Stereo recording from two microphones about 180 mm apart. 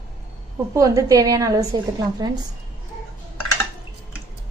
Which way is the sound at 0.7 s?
20° right (ahead or behind).